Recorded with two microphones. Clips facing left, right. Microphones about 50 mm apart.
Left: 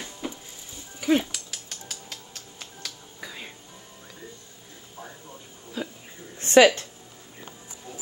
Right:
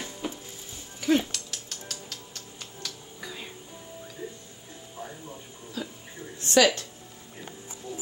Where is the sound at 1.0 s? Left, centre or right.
Centre.